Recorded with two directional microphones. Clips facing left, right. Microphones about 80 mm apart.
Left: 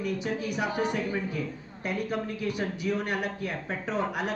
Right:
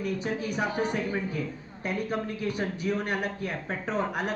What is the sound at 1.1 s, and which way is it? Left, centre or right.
A man's voice, centre.